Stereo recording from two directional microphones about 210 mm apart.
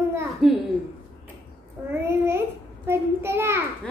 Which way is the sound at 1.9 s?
10° right (ahead or behind).